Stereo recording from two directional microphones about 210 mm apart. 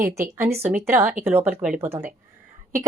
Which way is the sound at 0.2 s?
10° right (ahead or behind).